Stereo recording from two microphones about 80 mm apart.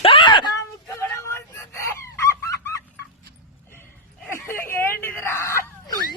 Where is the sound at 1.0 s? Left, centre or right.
Left.